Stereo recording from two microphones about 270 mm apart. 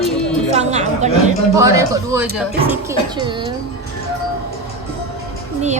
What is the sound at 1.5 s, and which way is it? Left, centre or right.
A woman's voice, centre.